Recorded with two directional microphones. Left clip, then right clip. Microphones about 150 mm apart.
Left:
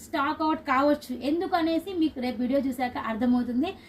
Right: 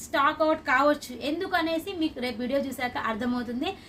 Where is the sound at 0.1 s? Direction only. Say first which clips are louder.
Right 3 dB; 30° right (ahead or behind).